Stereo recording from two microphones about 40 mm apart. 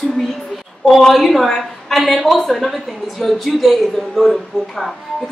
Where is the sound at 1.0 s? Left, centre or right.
Centre.